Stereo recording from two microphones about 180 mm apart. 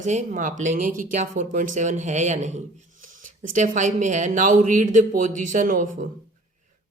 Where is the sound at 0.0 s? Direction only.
40° right (ahead or behind).